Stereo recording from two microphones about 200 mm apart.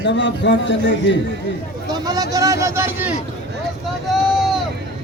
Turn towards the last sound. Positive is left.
turn(degrees=0)  # may be behind; listen again after turning